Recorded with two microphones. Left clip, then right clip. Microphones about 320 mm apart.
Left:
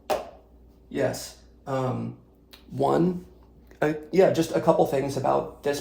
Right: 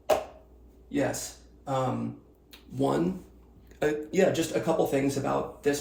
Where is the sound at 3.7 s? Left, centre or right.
Centre.